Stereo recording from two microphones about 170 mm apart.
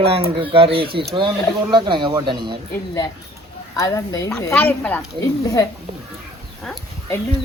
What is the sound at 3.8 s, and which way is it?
Speech, 20° left (ahead or behind).